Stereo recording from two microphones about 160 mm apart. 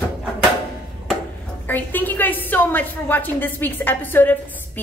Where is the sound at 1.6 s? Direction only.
10° left (ahead or behind).